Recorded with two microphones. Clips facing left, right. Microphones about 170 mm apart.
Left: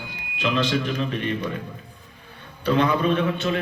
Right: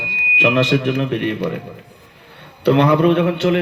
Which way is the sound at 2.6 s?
70° right (ahead or behind).